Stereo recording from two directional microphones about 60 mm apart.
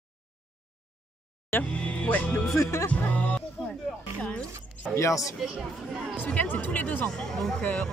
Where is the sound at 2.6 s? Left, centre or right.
Left.